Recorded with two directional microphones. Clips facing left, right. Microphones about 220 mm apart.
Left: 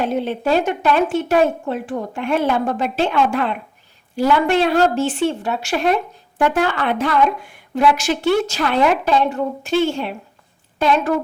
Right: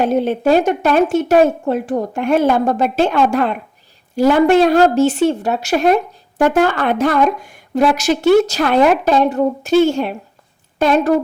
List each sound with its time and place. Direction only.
0.0 s a woman's voice: 45° right (ahead or behind)